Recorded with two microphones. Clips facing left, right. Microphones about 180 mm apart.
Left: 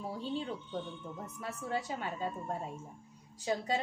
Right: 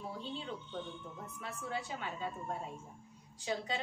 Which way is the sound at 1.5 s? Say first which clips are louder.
Left 4 dB; 40° left (ahead or behind).